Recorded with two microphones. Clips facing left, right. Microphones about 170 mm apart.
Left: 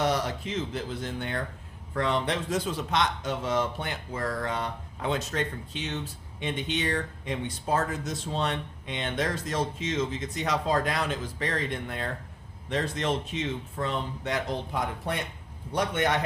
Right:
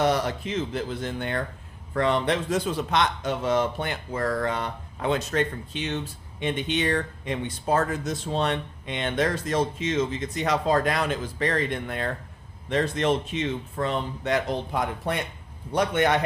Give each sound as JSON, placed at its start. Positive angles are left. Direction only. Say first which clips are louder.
{"t": 0.0, "sound": "speech", "louder": "right 4 dB", "side_deg": -60}